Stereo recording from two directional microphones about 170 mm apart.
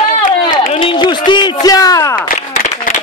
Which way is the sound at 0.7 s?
30° left (ahead or behind).